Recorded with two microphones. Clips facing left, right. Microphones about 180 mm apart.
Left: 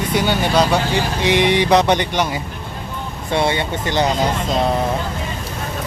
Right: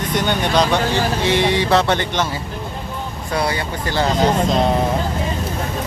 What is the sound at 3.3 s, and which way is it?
Speech, 25° left (ahead or behind).